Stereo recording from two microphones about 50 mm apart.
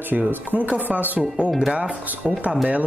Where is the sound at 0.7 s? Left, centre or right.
Right.